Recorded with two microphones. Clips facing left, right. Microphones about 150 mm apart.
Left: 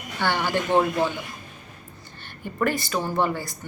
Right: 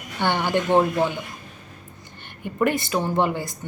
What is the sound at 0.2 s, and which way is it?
Speech, 20° right (ahead or behind).